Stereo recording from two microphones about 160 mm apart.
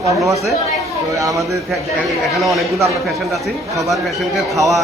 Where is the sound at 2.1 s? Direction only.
Centre (ahead or behind).